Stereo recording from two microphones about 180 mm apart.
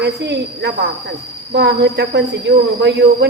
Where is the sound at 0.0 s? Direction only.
70° right (ahead or behind).